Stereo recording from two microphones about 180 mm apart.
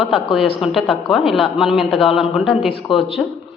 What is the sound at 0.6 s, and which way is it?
A woman's voice, centre (ahead or behind).